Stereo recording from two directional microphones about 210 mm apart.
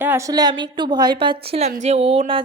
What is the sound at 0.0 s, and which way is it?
A woman's voice, 10° right (ahead or behind).